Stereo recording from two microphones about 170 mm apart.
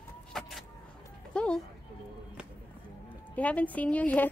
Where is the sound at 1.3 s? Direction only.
5° left (ahead or behind).